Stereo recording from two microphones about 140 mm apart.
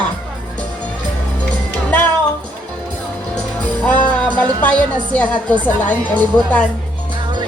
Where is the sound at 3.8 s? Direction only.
10° left (ahead or behind).